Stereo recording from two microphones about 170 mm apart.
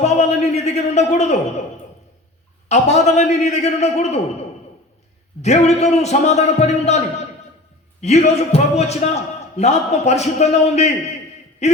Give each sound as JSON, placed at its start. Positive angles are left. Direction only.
{"t": 0.0, "sound": "a man's voice", "side_deg": 40}
{"t": 2.6, "sound": "a man's voice", "side_deg": 40}
{"t": 5.4, "sound": "a man's voice", "side_deg": 40}
{"t": 11.6, "sound": "a sound", "side_deg": 40}